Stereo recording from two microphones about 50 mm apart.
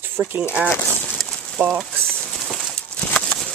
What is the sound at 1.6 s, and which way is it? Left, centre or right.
Speech, right.